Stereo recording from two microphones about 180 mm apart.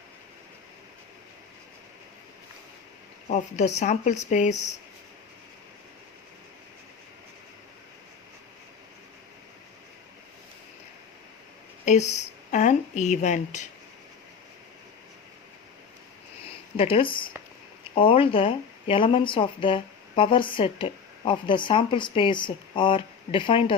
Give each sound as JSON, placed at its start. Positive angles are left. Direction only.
{"t": 3.2, "sound": "speech", "side_deg": 40}
{"t": 11.9, "sound": "speech", "side_deg": 40}
{"t": 16.7, "sound": "a woman's voice", "side_deg": 30}